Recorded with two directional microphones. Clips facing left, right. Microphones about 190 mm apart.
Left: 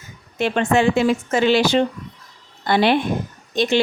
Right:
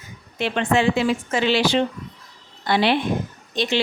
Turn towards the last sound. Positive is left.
turn(degrees=50)  # may be behind; listen again after turning